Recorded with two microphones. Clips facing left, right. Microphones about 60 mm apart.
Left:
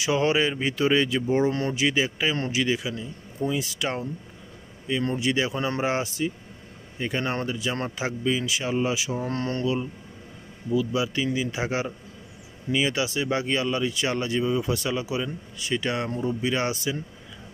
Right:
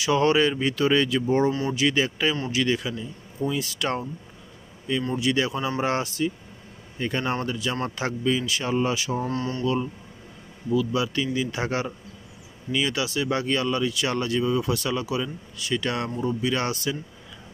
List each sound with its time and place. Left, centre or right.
0.0 s speech: centre
5.1 s speech: left
7.5 s speech: centre
9.2 s speech: left
10.7 s speech: centre